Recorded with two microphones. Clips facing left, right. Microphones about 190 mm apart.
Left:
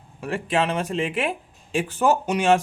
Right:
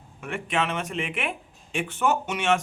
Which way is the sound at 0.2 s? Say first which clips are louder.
Left 4 dB; 35° left (ahead or behind).